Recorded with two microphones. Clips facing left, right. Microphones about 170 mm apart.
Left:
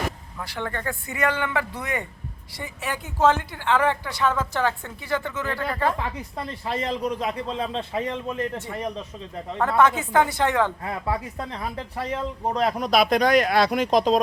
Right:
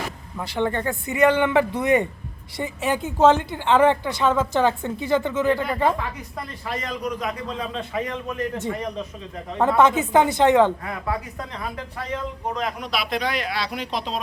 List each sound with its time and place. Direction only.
0.3 s a woman's voice: 20° right (ahead or behind)
6.0 s a man's voice: 30° left (ahead or behind)
9.6 s a woman's voice: 20° right (ahead or behind)
10.8 s speech: 30° left (ahead or behind); by 14.2 s 45° left (ahead or behind)